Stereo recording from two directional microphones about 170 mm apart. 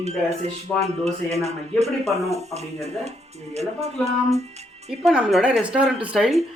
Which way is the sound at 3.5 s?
40° right (ahead or behind).